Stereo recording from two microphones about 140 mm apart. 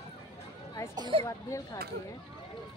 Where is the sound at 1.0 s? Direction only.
35° right (ahead or behind).